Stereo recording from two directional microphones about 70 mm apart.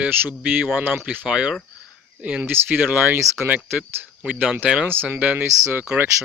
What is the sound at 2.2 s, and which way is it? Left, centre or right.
Speech, centre.